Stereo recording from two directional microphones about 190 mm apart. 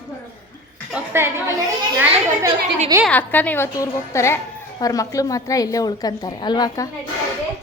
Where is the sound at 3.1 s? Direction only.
10° left (ahead or behind).